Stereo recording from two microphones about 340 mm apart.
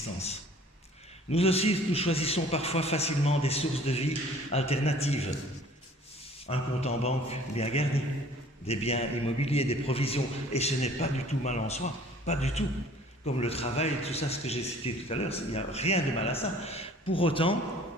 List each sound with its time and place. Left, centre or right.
1.3 s a man's voice: centre
6.5 s a man's voice: centre